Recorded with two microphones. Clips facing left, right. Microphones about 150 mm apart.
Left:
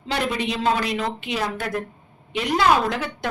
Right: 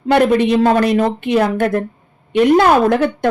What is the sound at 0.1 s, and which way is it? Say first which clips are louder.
A woman's voice: right 13 dB; 55° right (ahead or behind).